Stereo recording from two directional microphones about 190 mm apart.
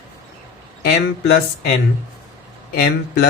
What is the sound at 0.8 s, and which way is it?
Speech, 60° left (ahead or behind).